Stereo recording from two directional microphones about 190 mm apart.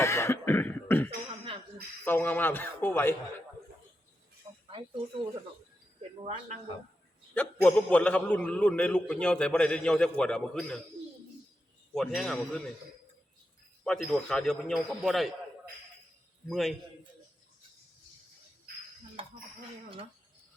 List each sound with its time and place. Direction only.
0.0 s cough: 15° left (ahead or behind)
2.0 s speech: 10° left (ahead or behind)
6.0 s cricket: 35° right (ahead or behind)
7.3 s a man's voice: 5° left (ahead or behind)
11.9 s a man's voice: centre (ahead or behind)
13.8 s a man's voice: 5° left (ahead or behind)
16.5 s a man's voice: centre (ahead or behind)